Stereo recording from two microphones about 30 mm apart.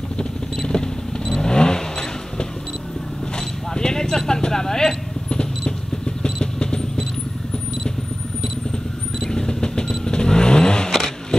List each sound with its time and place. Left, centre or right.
0.6 s vehicle: centre
9.3 s a sound: left
10.0 s vehicle: left